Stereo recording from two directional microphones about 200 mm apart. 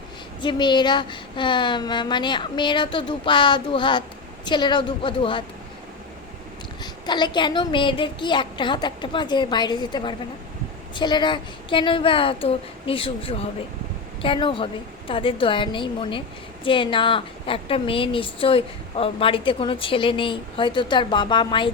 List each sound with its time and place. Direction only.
0.4 s a woman's voice: 20° left (ahead or behind)
6.8 s a woman's voice: 20° left (ahead or behind)